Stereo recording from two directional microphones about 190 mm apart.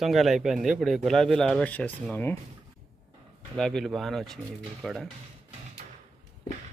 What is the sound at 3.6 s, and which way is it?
Speech, centre (ahead or behind).